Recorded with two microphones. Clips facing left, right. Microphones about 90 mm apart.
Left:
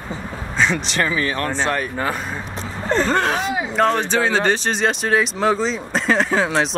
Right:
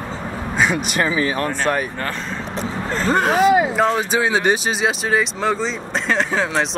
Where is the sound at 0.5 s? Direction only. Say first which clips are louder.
Even; 10° right (ahead or behind).